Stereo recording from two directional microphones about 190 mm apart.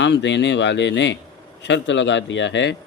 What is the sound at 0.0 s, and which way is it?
Speech, 70° left (ahead or behind).